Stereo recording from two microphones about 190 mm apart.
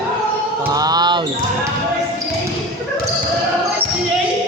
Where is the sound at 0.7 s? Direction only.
20° right (ahead or behind).